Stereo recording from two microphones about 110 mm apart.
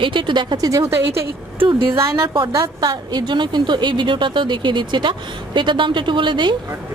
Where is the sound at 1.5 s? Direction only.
50° right (ahead or behind).